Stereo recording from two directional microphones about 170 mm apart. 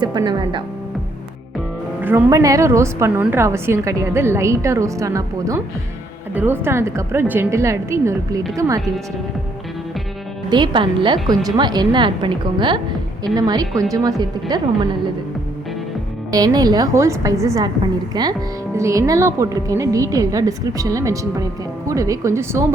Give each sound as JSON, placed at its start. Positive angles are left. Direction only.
{"t": 0.0, "sound": "speech", "side_deg": -25}
{"t": 2.0, "sound": "a woman's voice", "side_deg": -10}
{"t": 10.5, "sound": "speech", "side_deg": -25}
{"t": 16.3, "sound": "a woman's voice", "side_deg": -20}